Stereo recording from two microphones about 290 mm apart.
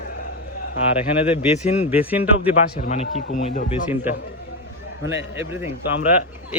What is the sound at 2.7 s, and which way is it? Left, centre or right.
Speech, left.